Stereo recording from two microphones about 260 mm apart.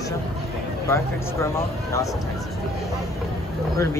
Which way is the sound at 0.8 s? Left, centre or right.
Centre.